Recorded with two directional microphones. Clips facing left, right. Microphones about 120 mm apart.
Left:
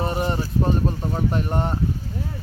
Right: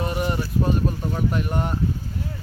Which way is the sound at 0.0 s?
35° left (ahead or behind).